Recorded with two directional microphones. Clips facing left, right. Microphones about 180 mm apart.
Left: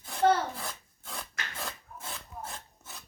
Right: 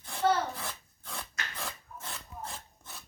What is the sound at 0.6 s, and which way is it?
Filing, centre (ahead or behind).